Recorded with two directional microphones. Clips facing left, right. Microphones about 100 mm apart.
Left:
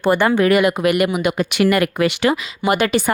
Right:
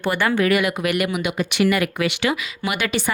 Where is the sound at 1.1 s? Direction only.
45° left (ahead or behind).